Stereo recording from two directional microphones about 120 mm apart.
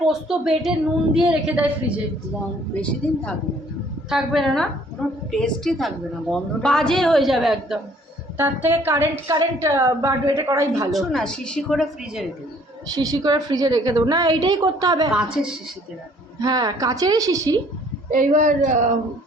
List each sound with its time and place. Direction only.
0.1 s a woman's voice: 5° right (ahead or behind)
2.8 s a woman's voice: 10° left (ahead or behind)
4.1 s a woman's voice: centre (ahead or behind)
8.4 s a woman's voice: 15° right (ahead or behind)
10.9 s a woman's voice: 5° left (ahead or behind)
12.9 s a woman's voice: 30° right (ahead or behind)
15.1 s a woman's voice: 5° right (ahead or behind)
16.4 s a woman's voice: 30° right (ahead or behind)
18.1 s speech: 90° right